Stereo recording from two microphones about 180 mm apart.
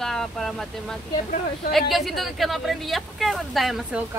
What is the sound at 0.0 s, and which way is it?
Speech, centre (ahead or behind).